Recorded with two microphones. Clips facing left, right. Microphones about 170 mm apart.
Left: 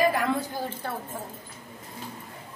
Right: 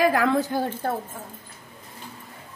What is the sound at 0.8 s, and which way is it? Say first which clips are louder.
Speech: right 7 dB; 45° right (ahead or behind).